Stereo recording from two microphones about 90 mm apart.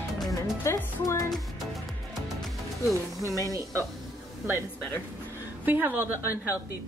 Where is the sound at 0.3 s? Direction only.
40° left (ahead or behind).